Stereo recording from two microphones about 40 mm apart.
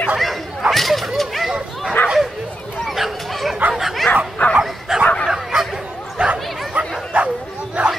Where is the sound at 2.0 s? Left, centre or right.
Left.